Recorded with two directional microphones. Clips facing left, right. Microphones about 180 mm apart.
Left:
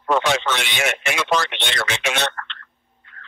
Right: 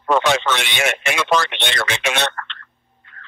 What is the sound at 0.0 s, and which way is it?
Speech, 65° right (ahead or behind).